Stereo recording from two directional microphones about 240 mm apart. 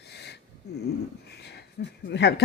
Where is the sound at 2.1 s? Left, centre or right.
Left.